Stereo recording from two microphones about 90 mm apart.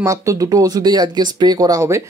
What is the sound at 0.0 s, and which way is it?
Speech, 35° right (ahead or behind).